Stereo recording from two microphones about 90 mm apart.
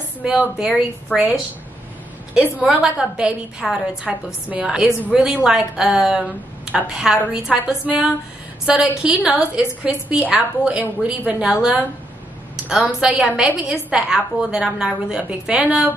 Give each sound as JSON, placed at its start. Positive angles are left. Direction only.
{"t": 0.2, "sound": "a woman's voice", "side_deg": -10}
{"t": 1.1, "sound": "a woman's voice", "side_deg": 20}
{"t": 2.3, "sound": "a woman's voice", "side_deg": -10}
{"t": 13.0, "sound": "a woman's voice", "side_deg": -5}